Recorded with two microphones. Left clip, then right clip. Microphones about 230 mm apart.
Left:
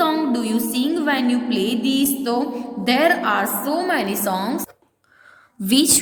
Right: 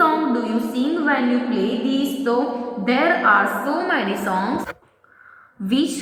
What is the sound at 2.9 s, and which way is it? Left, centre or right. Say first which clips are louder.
A woman's voice: right 1 dB; left.